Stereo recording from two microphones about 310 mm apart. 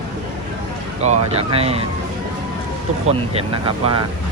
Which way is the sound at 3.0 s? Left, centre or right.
Centre.